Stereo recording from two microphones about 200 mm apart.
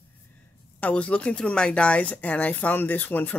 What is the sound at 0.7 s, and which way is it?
Speech, 5° left (ahead or behind).